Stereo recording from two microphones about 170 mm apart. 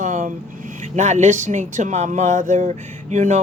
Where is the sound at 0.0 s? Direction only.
45° right (ahead or behind).